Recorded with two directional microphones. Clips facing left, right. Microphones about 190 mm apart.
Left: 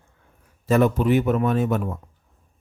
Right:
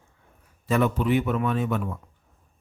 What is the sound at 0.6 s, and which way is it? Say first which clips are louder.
Speech: left 4 dB; 40° left (ahead or behind).